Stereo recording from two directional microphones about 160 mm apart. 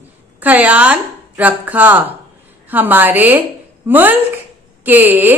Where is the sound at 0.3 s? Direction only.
10° right (ahead or behind).